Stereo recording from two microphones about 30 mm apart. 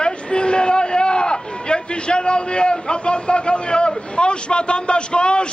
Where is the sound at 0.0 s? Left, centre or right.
Left.